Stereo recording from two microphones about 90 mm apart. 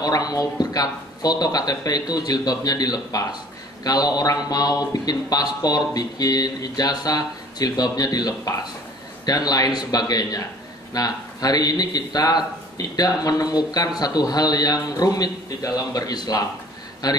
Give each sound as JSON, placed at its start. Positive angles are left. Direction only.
{"t": 0.0, "sound": "speech", "side_deg": 45}